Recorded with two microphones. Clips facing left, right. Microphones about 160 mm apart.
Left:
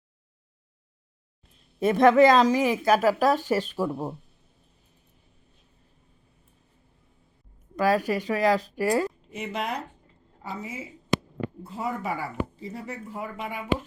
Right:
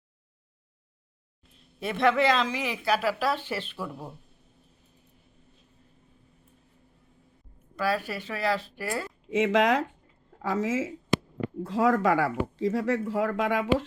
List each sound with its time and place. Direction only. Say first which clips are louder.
1.8 s speech: left 7 dB; 45° left (ahead or behind)
7.8 s speech: left 5 dB; 45° left (ahead or behind)
9.3 s speech: right 14 dB; 90° right